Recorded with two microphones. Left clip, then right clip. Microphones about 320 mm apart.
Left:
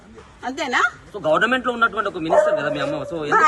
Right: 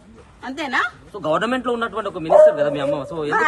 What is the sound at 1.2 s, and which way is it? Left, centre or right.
A man's voice, right.